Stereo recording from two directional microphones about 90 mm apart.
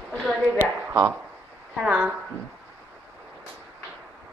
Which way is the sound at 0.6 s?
25° right (ahead or behind).